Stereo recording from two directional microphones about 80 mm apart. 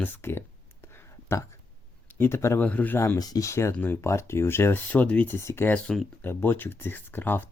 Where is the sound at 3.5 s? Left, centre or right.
Left; by 5.3 s centre.